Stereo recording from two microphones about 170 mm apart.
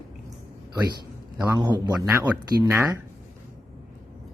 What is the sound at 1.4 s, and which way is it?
Speech, 25° right (ahead or behind).